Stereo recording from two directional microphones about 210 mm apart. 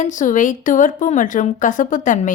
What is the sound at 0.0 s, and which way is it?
A woman's voice, 35° left (ahead or behind).